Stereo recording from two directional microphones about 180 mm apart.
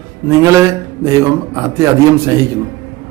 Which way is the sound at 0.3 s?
15° right (ahead or behind).